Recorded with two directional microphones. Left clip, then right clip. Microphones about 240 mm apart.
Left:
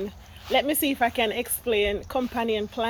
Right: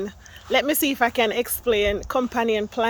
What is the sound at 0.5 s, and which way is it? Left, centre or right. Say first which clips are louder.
Speech: right 2 dB; centre.